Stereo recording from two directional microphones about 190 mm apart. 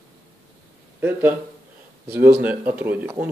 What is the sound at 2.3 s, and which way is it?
Speech, 10° right (ahead or behind).